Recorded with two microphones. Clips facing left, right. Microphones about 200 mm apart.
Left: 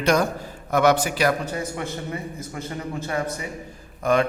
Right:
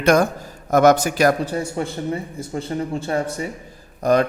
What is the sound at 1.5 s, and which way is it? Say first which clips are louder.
A man's voice: right 4 dB; 30° right (ahead or behind).